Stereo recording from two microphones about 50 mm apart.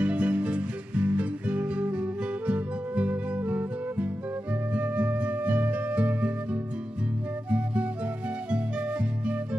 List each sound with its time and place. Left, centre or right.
0.0 s music: right